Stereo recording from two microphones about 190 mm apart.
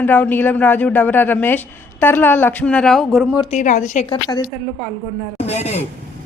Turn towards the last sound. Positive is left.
turn(degrees=35)  # may be behind; listen again after turning